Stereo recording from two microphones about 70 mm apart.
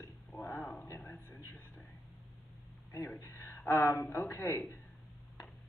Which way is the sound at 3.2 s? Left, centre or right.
Left.